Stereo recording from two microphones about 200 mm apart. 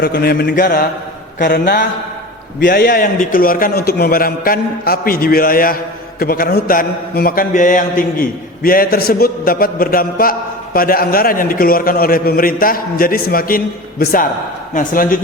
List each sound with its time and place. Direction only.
0.0 s a man's voice: 50° left (ahead or behind)